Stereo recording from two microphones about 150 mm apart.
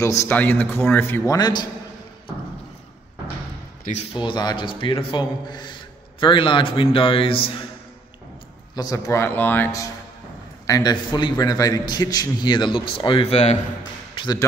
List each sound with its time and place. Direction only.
0.0 s a man's voice: 20° left (ahead or behind)
4.1 s speech: 30° left (ahead or behind)
8.7 s a man's voice: 25° left (ahead or behind); by 13.6 s 45° left (ahead or behind)
14.1 s basketball bounce: 30° left (ahead or behind)